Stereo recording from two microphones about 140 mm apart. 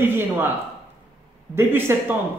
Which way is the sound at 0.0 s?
15° right (ahead or behind).